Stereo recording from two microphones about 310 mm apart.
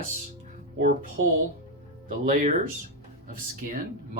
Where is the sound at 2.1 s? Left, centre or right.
Right.